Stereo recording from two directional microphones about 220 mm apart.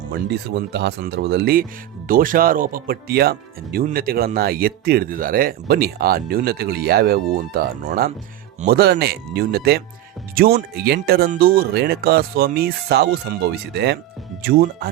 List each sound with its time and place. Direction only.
0.0 s speech: 50° right (ahead or behind)